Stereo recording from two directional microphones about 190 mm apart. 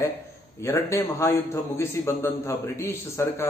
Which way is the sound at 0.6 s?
15° left (ahead or behind).